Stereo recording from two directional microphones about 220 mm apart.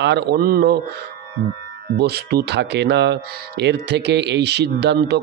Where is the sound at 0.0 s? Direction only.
50° right (ahead or behind).